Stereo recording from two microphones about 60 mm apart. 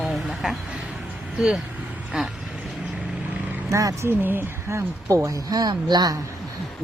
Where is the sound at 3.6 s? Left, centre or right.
Right.